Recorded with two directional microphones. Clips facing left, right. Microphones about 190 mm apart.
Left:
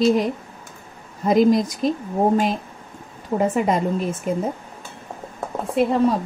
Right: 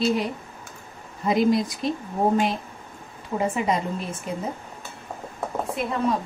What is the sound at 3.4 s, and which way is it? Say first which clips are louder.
Speech: left 4 dB; 50° left (ahead or behind).